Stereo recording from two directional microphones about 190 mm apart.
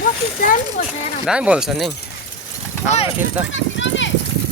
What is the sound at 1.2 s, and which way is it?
Speech, 5° right (ahead or behind).